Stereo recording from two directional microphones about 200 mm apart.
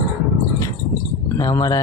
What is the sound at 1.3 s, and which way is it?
Speech, 15° left (ahead or behind).